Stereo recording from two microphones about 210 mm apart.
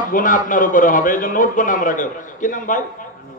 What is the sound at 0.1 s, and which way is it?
A man's voice, 40° left (ahead or behind).